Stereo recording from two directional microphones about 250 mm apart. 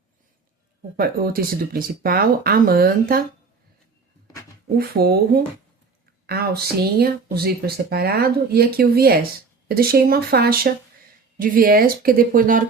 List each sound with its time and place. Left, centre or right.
0.9 s speech: right
4.8 s speech: right